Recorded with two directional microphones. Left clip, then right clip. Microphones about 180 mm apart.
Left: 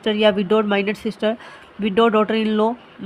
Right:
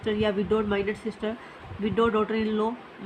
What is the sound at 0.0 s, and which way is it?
Speech, 55° left (ahead or behind).